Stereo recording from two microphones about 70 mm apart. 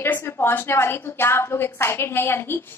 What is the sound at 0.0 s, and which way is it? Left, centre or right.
A woman's voice, left.